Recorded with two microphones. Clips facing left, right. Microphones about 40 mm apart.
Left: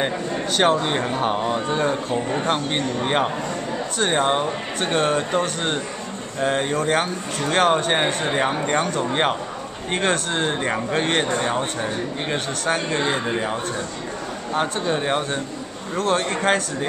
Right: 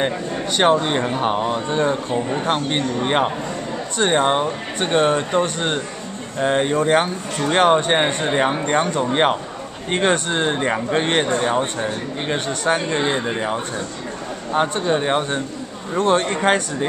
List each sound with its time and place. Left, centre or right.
0.6 s a man's voice: centre